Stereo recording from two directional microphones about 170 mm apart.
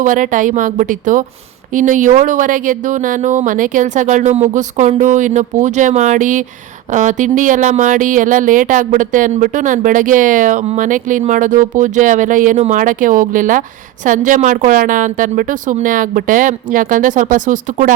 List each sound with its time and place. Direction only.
0.0 s speech: 50° right (ahead or behind)